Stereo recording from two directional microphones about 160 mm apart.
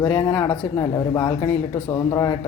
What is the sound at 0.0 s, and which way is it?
Speech, 15° left (ahead or behind).